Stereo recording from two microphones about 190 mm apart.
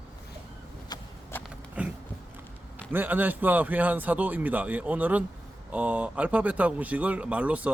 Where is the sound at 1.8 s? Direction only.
5° right (ahead or behind).